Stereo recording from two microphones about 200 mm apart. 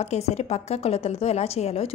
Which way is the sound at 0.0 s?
35° left (ahead or behind).